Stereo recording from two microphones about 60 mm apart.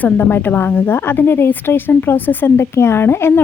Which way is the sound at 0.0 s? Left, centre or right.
Left.